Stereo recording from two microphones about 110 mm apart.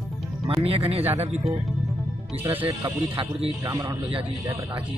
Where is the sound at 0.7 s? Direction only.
65° right (ahead or behind).